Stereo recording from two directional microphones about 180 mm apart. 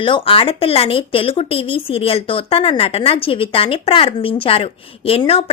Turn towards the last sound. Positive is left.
turn(degrees=30)  # may be behind; listen again after turning